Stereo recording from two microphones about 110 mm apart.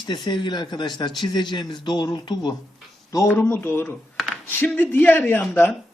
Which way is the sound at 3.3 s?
20° left (ahead or behind).